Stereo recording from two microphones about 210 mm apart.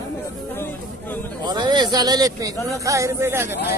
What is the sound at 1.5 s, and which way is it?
Speech, 20° right (ahead or behind).